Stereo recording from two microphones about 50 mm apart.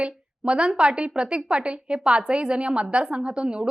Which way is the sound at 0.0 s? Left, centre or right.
Centre.